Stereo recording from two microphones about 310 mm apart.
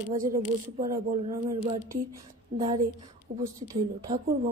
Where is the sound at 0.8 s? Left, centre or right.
Centre.